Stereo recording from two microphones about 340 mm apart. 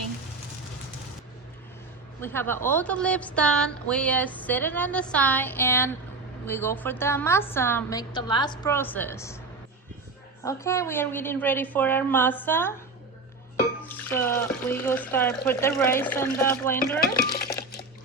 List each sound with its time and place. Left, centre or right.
2.2 s a woman's voice: centre
10.4 s a woman's voice: centre
14.2 s a woman's voice: centre
16.7 s speech: left